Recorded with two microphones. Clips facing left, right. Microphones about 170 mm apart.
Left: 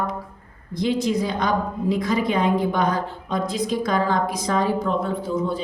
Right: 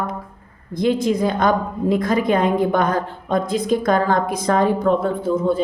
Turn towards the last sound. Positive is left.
turn(degrees=-50)  # may be behind; listen again after turning